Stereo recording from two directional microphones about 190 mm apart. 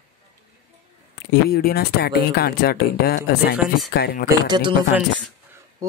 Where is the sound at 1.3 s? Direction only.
55° left (ahead or behind).